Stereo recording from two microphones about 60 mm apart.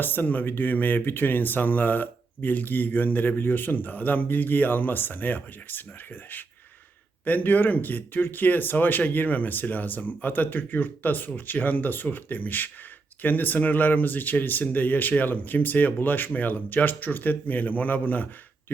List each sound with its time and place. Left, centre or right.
0.0 s speech: left